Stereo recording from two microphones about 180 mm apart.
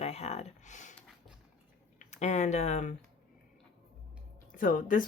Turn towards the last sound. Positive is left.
turn(degrees=50)  # may be behind; listen again after turning